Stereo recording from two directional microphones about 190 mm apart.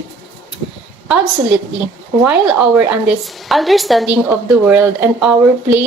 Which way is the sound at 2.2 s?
5° right (ahead or behind).